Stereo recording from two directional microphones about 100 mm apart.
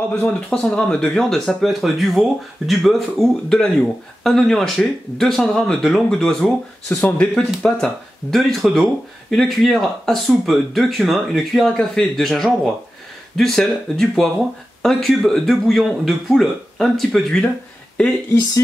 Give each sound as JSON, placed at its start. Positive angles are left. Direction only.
{"t": 0.1, "sound": "speech", "side_deg": 5}
{"t": 6.9, "sound": "speech", "side_deg": 20}
{"t": 7.6, "sound": "speech", "side_deg": 0}